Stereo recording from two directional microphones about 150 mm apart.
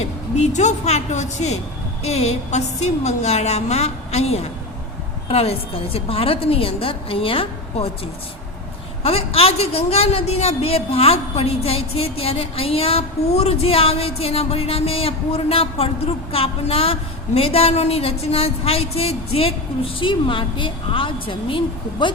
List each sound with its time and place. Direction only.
0.0 s a woman's voice: 50° left (ahead or behind)
9.0 s speech: 40° left (ahead or behind)